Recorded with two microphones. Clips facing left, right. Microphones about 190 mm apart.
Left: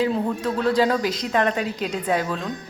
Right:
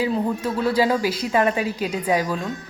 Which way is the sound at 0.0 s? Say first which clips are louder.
Even; 5° right (ahead or behind).